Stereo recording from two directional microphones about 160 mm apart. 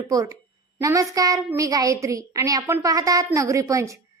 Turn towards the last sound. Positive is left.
turn(degrees=-20)  # may be behind; listen again after turning